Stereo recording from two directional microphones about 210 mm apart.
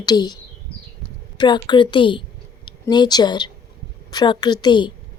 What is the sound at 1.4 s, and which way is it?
A woman's voice, 20° left (ahead or behind).